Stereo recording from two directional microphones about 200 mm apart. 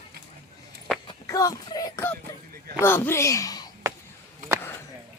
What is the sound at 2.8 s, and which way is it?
Speech, 10° left (ahead or behind).